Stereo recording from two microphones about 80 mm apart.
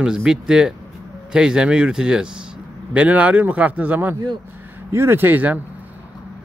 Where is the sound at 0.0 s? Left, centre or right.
Centre.